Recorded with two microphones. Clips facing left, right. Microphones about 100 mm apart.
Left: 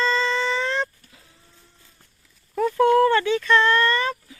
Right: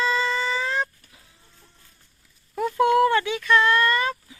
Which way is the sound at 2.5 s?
10° right (ahead or behind).